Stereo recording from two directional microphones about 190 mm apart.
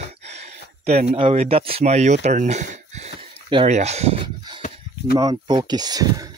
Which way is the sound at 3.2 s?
30° right (ahead or behind).